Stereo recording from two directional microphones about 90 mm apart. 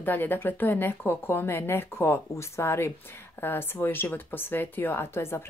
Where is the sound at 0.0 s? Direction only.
20° left (ahead or behind).